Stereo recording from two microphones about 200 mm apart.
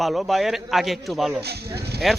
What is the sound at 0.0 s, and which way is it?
Speech, centre (ahead or behind).